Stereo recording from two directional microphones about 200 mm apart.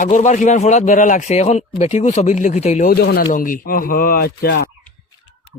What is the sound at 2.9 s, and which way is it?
Speech, 50° left (ahead or behind).